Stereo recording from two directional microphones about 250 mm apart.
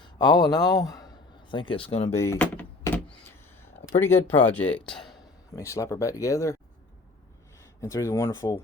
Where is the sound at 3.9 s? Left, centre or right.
Centre.